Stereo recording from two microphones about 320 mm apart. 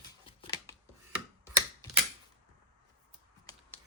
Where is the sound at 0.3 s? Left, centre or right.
Centre.